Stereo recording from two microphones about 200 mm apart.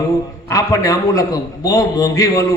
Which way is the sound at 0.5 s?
15° left (ahead or behind).